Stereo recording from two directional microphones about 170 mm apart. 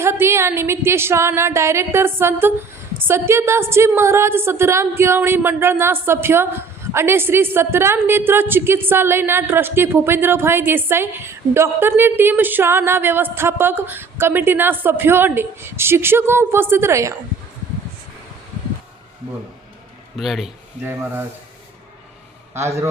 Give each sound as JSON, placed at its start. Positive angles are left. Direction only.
{"t": 0.0, "sound": "a woman's voice", "side_deg": -15}
{"t": 20.1, "sound": "a man's voice", "side_deg": 0}
{"t": 20.8, "sound": "a woman's voice", "side_deg": -10}
{"t": 22.5, "sound": "a woman's voice", "side_deg": -15}